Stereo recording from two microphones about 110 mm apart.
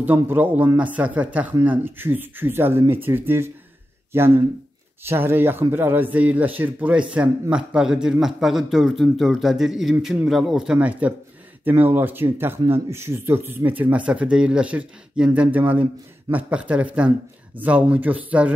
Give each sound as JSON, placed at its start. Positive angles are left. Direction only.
{"t": 0.0, "sound": "speech", "side_deg": -15}